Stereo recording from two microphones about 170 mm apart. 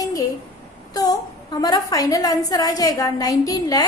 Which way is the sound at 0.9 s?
20° left (ahead or behind).